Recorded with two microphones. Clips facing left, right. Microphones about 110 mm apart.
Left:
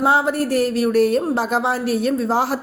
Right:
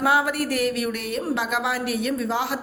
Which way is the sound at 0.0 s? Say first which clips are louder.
Left 4 dB; 30° left (ahead or behind).